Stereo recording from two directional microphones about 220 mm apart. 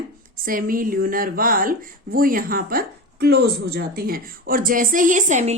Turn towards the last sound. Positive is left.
turn(degrees=-35)  # may be behind; listen again after turning